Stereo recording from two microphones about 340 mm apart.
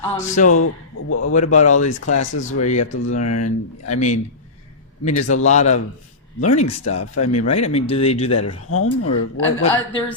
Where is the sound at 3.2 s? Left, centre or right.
Left.